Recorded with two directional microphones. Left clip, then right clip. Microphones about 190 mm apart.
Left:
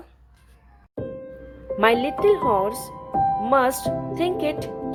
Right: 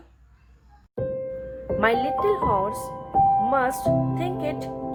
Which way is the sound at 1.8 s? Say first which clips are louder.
Left 3 dB; 15° left (ahead or behind).